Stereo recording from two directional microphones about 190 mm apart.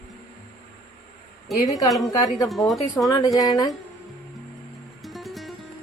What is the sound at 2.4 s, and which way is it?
Speech, centre (ahead or behind).